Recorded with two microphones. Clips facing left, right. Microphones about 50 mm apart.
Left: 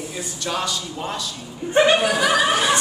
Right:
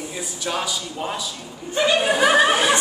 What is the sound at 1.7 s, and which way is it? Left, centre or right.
Speech, left.